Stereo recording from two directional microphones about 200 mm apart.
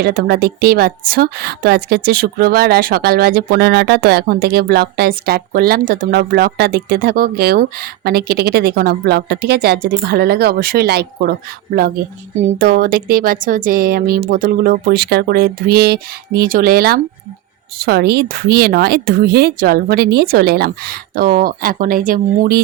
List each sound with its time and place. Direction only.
0.0 s a woman's voice: 50° right (ahead or behind)